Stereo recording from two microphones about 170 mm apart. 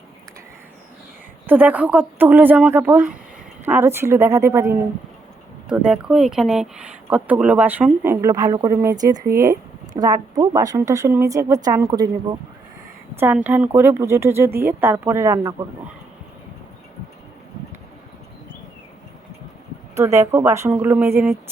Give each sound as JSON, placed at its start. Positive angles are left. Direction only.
{"t": 1.5, "sound": "speech", "side_deg": -10}
{"t": 5.6, "sound": "a woman's voice", "side_deg": -5}
{"t": 13.1, "sound": "speech", "side_deg": -10}
{"t": 20.0, "sound": "speech", "side_deg": -15}